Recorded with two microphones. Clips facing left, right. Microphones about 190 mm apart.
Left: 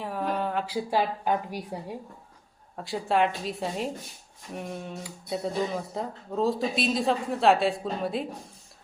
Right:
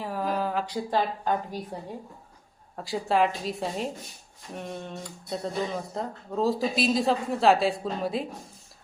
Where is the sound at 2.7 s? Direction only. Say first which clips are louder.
Right 1 dB; centre (ahead or behind).